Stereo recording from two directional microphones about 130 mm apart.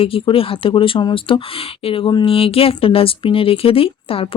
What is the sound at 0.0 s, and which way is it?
Speech, 45° left (ahead or behind).